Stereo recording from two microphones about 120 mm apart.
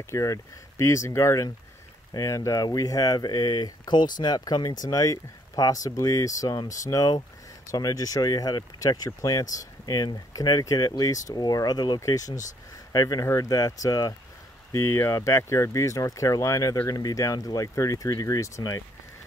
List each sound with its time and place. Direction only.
0.0 s speech: 25° left (ahead or behind)